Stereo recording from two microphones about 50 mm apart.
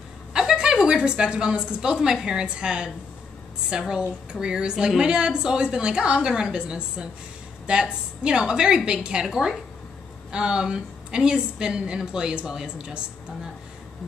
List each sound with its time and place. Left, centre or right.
0.3 s a woman's voice: centre
9.2 s a woman's voice: centre
10.3 s a woman's voice: centre